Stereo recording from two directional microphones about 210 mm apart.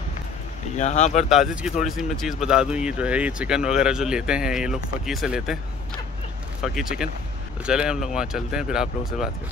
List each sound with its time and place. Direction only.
0.7 s speech: 35° left (ahead or behind)
1.3 s speech: 5° right (ahead or behind)
6.6 s speech: centre (ahead or behind)